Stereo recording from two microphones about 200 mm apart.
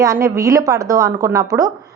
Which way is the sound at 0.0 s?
15° right (ahead or behind).